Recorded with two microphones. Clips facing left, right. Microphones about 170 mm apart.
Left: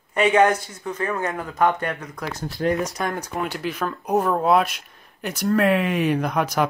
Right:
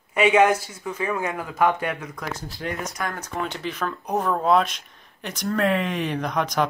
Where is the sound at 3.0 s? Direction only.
20° left (ahead or behind).